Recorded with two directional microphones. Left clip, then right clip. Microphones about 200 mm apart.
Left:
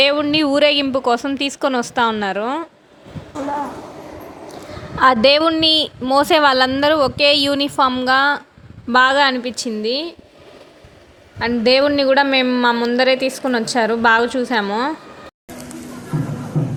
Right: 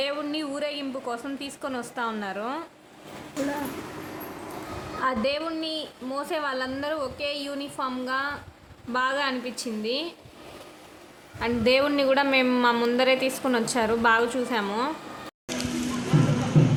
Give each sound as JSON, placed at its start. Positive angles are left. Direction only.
{"t": 0.0, "sound": "a woman's voice", "side_deg": 40}
{"t": 4.9, "sound": "a woman's voice", "side_deg": 50}
{"t": 11.3, "sound": "a woman's voice", "side_deg": 30}